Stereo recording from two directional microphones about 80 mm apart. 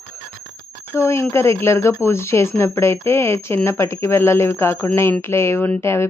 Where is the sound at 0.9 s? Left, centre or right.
Left.